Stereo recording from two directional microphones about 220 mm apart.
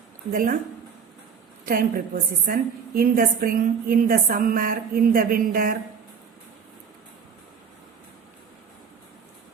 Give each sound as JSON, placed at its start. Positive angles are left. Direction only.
{"t": 0.3, "sound": "a woman's voice", "side_deg": -40}
{"t": 1.6, "sound": "a woman's voice", "side_deg": -40}